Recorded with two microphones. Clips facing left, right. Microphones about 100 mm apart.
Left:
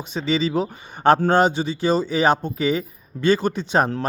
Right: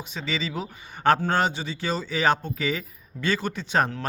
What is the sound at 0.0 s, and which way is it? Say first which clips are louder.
A man's voice: left 8 dB; 25° left (ahead or behind).